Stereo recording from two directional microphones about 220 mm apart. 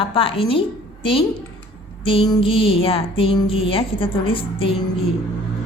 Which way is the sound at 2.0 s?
20° left (ahead or behind).